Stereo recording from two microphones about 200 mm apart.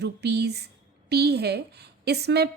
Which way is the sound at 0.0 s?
55° right (ahead or behind).